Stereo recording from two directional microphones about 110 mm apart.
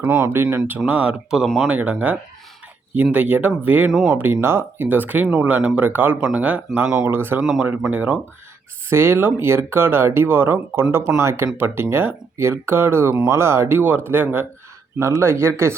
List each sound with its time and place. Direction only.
0.0 s speech: 15° right (ahead or behind)